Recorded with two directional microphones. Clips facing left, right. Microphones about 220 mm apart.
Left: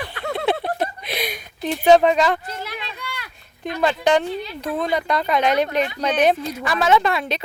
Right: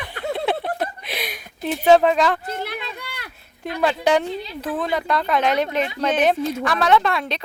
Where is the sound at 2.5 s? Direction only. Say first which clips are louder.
Right 3 dB; 55° right (ahead or behind).